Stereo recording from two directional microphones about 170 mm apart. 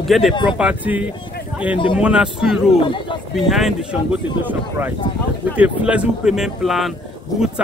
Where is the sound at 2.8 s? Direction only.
30° left (ahead or behind).